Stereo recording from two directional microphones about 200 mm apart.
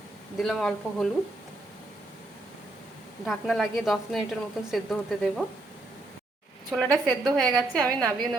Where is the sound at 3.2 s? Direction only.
Centre (ahead or behind).